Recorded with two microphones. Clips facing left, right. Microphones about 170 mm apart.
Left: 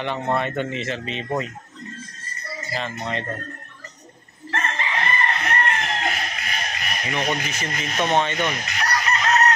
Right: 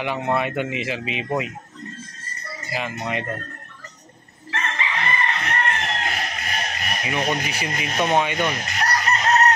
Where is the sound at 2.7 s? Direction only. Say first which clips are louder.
Right 1 dB; 10° right (ahead or behind).